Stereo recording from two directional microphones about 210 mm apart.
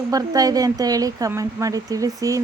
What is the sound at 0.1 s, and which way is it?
Speech, 15° right (ahead or behind).